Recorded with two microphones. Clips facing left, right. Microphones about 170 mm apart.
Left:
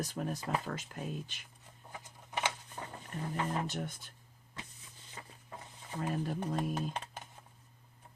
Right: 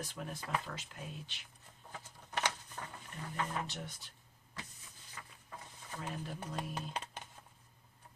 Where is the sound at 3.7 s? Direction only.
50° left (ahead or behind).